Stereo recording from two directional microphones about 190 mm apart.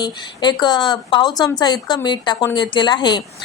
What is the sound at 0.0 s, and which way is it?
A woman's voice, 25° left (ahead or behind).